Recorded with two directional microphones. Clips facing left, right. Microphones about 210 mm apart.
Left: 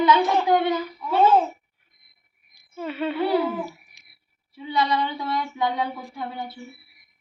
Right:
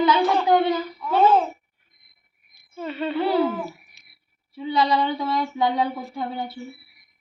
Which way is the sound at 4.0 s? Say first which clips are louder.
Even; 15° left (ahead or behind).